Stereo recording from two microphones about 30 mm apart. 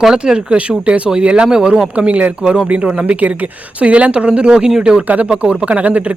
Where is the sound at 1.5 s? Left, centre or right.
Right.